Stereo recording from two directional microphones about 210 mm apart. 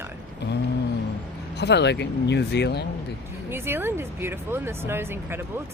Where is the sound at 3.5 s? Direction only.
10° right (ahead or behind).